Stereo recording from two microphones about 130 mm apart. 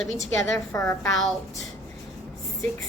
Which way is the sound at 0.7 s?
20° left (ahead or behind).